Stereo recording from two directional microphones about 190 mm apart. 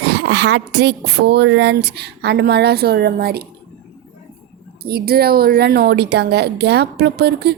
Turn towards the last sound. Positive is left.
turn(degrees=-60)  # may be behind; listen again after turning